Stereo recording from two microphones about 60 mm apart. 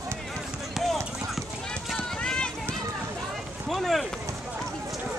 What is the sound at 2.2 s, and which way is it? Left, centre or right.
Run, centre.